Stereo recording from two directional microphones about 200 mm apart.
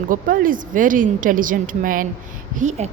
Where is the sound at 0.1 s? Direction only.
45° right (ahead or behind).